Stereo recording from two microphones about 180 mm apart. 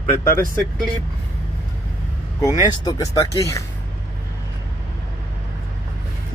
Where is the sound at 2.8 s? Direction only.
20° left (ahead or behind).